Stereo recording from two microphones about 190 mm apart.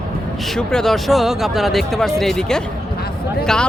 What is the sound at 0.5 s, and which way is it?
Speech, centre (ahead or behind).